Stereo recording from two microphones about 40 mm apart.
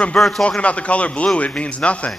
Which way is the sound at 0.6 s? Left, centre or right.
Left.